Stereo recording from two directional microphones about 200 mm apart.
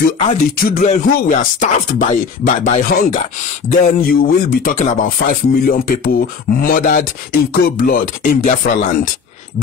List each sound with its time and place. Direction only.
0.6 s speech: 45° left (ahead or behind)